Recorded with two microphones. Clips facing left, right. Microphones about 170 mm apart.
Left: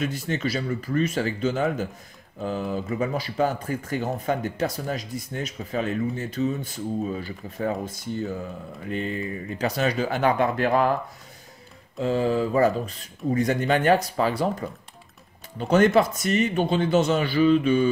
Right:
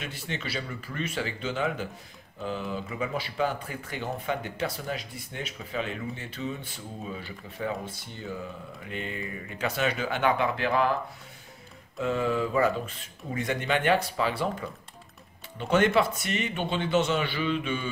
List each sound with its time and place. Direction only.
0.0 s speech: 45° left (ahead or behind)
12.0 s speech: 35° left (ahead or behind)